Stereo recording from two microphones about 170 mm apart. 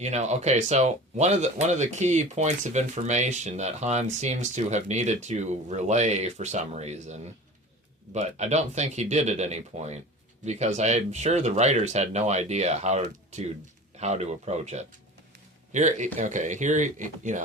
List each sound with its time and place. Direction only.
0.0 s speech: 40° right (ahead or behind)